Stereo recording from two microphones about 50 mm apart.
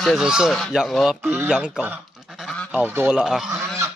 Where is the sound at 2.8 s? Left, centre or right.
Right.